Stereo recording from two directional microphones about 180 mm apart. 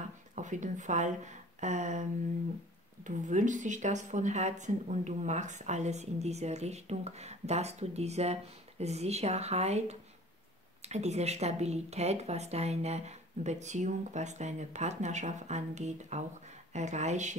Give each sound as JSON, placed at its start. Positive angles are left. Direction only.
{"t": 0.4, "sound": "speech", "side_deg": -45}